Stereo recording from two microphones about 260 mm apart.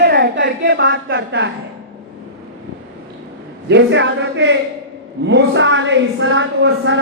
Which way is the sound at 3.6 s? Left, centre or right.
Right.